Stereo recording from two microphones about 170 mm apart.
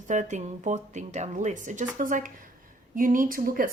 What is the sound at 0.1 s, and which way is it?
A woman's voice, 45° right (ahead or behind).